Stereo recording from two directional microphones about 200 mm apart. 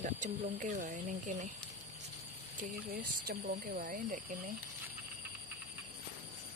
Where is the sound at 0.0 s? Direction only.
40° right (ahead or behind).